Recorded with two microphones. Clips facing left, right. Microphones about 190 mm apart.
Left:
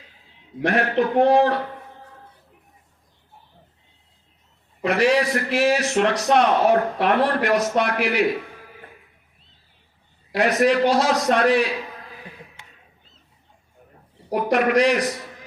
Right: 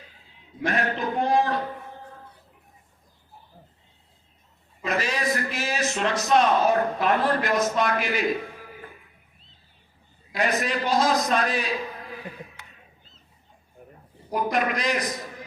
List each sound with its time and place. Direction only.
0.6 s a man's voice: 70° left (ahead or behind)
4.8 s a man's voice: 70° left (ahead or behind)
10.3 s a man's voice: 75° left (ahead or behind)
14.3 s a man's voice: 75° left (ahead or behind)